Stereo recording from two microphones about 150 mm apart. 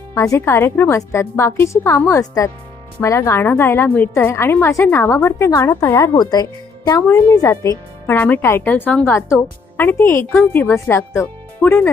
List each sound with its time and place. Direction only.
0.1 s a woman's voice: 20° left (ahead or behind)